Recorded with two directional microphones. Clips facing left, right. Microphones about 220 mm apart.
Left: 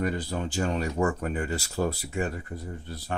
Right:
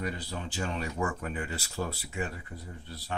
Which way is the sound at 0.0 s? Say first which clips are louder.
Left 7 dB; 50° left (ahead or behind).